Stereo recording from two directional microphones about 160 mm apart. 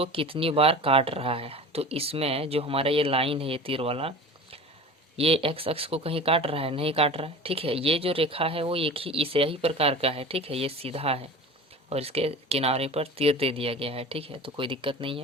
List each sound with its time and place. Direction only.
0.0 s speech: 35° right (ahead or behind)
5.1 s speech: 35° right (ahead or behind)